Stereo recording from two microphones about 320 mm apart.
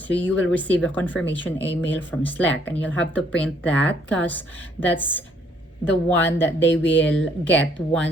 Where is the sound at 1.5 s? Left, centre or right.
Left.